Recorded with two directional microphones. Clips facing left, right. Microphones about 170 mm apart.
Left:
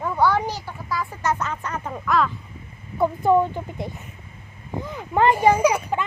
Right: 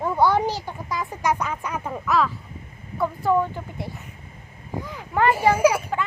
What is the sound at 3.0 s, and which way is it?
Speech, 20° left (ahead or behind).